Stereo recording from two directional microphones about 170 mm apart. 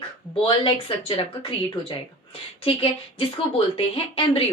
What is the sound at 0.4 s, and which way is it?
A woman's voice, 30° left (ahead or behind).